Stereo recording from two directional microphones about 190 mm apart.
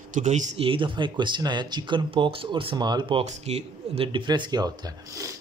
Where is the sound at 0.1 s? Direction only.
40° right (ahead or behind).